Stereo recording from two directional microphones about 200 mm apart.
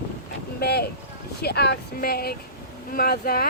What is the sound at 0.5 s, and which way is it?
Speech, 50° left (ahead or behind).